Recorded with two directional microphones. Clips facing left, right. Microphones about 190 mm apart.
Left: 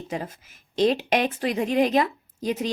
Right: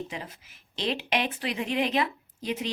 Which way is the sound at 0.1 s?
45° left (ahead or behind).